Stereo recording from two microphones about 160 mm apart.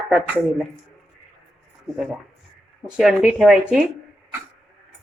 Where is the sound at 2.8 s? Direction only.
5° right (ahead or behind).